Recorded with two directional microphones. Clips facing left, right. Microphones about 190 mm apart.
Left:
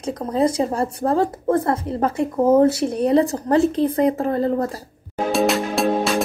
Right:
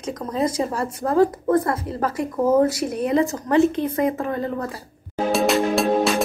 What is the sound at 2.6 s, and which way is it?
Speech, 35° left (ahead or behind).